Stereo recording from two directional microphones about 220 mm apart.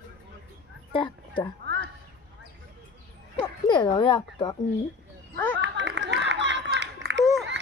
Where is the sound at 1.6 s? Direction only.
50° right (ahead or behind).